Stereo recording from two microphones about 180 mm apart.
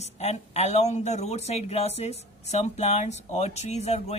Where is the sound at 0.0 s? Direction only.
35° left (ahead or behind).